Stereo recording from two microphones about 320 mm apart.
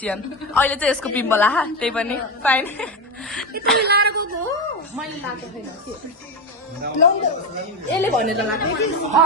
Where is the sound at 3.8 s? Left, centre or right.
Right.